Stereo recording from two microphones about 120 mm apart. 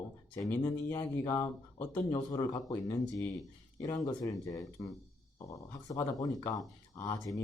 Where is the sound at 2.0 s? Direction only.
35° left (ahead or behind).